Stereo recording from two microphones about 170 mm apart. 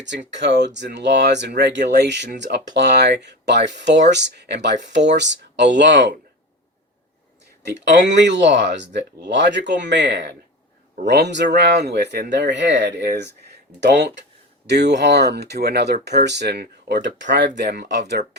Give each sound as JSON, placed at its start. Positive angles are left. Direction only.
{"t": 0.0, "sound": "speech", "side_deg": -90}
{"t": 7.7, "sound": "speech", "side_deg": -90}